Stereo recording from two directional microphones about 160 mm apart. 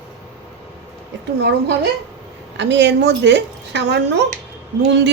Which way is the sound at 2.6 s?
90° right.